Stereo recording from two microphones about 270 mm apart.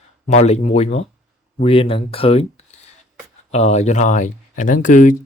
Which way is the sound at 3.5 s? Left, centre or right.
Left.